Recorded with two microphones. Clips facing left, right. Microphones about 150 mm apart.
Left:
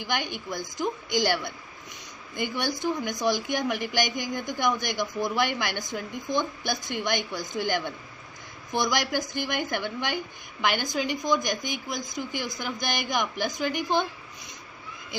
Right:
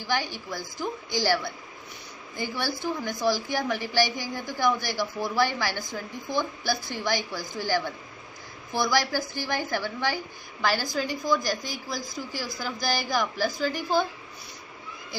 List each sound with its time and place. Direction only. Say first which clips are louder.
0.0 s a woman's voice: right 1 dB; 20° left (ahead or behind)